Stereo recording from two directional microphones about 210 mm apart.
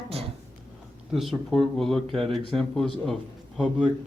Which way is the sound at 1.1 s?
Centre (ahead or behind).